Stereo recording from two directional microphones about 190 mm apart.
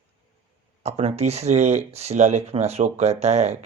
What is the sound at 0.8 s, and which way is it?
Speech, 35° right (ahead or behind).